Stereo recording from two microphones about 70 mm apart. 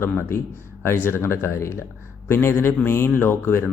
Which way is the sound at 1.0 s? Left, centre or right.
Left.